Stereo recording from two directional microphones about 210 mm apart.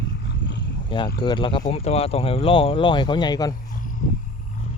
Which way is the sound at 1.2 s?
20° left (ahead or behind).